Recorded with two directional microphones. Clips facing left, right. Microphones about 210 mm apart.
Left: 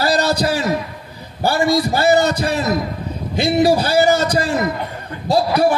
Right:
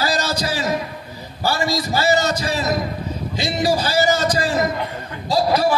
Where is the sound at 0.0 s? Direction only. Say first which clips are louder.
Left 5 dB; 60° left (ahead or behind).